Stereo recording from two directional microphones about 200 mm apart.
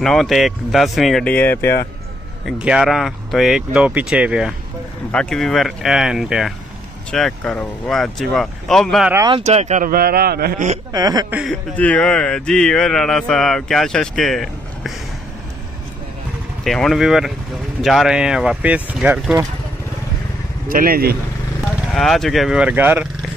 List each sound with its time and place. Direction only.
0.0 s speech: centre (ahead or behind)
2.4 s speech: 5° right (ahead or behind)
9.1 s speech: 20° right (ahead or behind)
9.4 s speech: 35° right (ahead or behind)
10.9 s speech: 20° right (ahead or behind)
11.2 s speech: 5° right (ahead or behind)
11.7 s speech: 5° left (ahead or behind)
16.6 s speech: centre (ahead or behind)
20.6 s speech: 45° right (ahead or behind)
21.9 s speech: centre (ahead or behind)